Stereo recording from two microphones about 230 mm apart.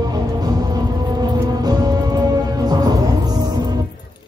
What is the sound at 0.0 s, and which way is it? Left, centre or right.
Music, centre.